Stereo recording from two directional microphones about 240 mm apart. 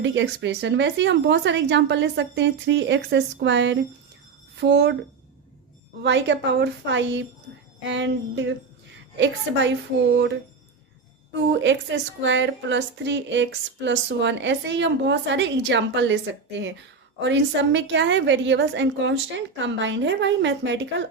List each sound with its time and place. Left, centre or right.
0.0 s speech: right
6.0 s speech: right
11.4 s speech: right